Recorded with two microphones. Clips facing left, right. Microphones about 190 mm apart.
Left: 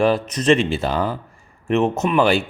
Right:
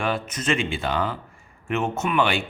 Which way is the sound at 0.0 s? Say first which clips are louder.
Left 8 dB; 35° left (ahead or behind).